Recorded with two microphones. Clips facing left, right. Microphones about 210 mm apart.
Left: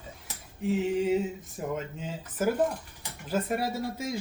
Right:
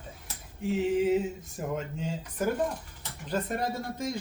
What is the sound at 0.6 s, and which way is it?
A man's voice, centre (ahead or behind).